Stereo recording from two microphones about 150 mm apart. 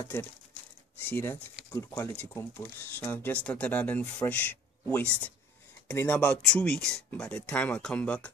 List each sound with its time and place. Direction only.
0.0 s speech: 15° left (ahead or behind)